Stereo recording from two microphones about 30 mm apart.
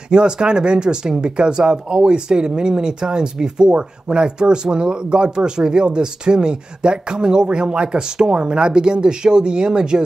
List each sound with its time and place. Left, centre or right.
0.1 s speech: right